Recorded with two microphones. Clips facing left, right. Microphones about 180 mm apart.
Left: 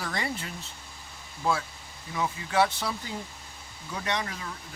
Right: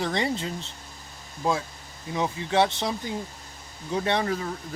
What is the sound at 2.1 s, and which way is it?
Speech, 25° right (ahead or behind).